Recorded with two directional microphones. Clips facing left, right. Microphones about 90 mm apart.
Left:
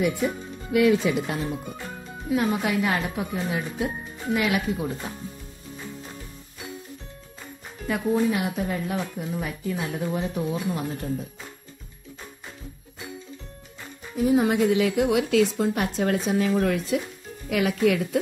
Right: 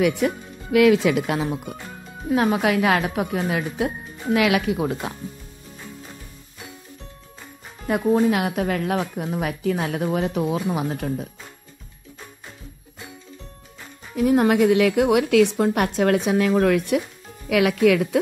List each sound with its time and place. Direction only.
0.0 s speech: 80° right
7.8 s speech: 45° right (ahead or behind)
8.3 s speech: 70° right (ahead or behind)
14.1 s a woman's voice: 70° right (ahead or behind)
17.5 s speech: 75° right (ahead or behind)